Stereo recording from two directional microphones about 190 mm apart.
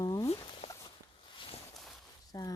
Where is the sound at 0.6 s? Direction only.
30° left (ahead or behind).